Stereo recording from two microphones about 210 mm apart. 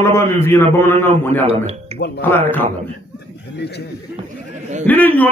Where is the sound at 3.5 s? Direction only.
50° left (ahead or behind).